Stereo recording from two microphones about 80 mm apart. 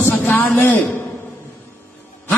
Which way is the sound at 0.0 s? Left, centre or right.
Left.